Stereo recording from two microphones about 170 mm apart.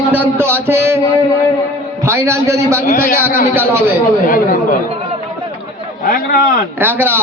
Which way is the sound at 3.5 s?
15° right (ahead or behind).